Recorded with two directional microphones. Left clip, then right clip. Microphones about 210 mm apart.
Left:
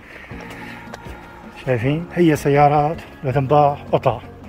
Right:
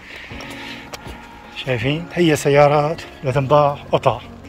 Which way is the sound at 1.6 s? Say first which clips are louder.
Left 1 dB; 15° left (ahead or behind).